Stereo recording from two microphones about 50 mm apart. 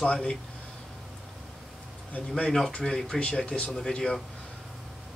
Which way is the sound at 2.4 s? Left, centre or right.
Centre.